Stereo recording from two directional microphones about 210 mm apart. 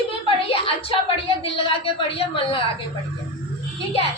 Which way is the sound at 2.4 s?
25° left (ahead or behind).